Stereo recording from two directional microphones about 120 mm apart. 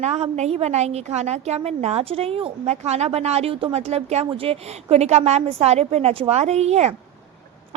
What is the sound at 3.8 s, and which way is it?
Speech, 65° right (ahead or behind).